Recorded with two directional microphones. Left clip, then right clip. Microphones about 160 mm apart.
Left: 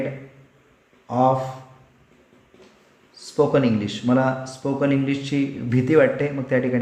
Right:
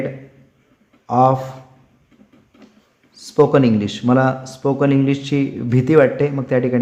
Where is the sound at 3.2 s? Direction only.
55° right (ahead or behind).